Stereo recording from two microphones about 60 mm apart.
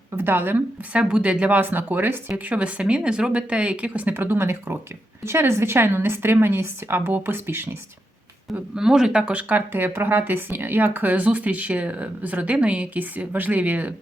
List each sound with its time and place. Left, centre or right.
0.2 s a woman's voice: right
0.9 s speech: centre
4.1 s a woman's voice: right
8.5 s speech: centre; by 13.9 s right